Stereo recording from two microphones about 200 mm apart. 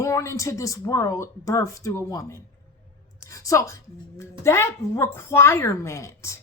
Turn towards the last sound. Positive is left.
turn(degrees=15)  # may be behind; listen again after turning